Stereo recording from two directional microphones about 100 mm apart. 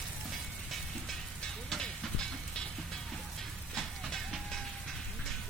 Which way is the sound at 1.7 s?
5° left (ahead or behind).